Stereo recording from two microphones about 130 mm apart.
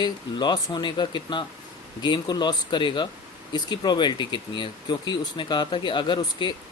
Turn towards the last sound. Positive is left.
turn(degrees=35)  # may be behind; listen again after turning